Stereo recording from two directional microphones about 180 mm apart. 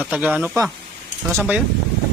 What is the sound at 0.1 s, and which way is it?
Speech, 5° right (ahead or behind).